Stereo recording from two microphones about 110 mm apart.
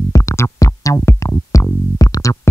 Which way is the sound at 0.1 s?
25° left (ahead or behind).